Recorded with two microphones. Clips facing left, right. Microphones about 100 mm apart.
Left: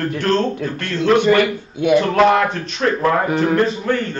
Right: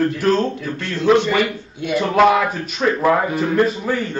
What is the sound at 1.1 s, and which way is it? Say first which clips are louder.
Burping: left 3 dB; 55° left (ahead or behind).